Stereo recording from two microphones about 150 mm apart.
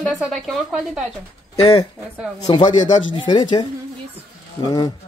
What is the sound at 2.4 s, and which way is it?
Speech, 30° left (ahead or behind).